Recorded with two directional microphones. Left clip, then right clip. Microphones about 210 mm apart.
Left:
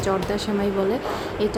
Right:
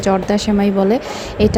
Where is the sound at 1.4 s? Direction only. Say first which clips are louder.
Right 10 dB; 30° right (ahead or behind).